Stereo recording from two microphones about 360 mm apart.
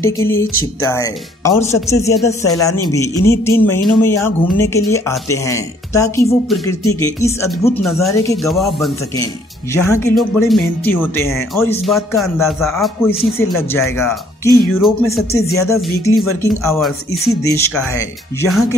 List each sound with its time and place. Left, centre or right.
0.0 s a man's voice: centre